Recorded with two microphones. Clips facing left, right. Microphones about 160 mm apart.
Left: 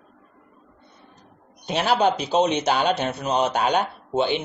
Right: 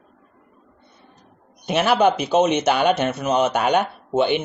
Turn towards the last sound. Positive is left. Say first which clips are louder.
# right 3 dB
turn(degrees=-55)  # may be behind; listen again after turning